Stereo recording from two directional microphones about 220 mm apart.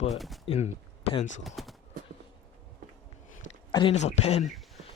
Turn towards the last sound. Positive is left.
turn(degrees=30)  # may be behind; listen again after turning